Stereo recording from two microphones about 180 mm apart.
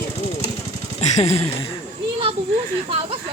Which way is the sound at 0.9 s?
35° left (ahead or behind).